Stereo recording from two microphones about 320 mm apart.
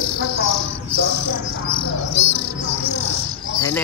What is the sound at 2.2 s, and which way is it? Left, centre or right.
Music, left.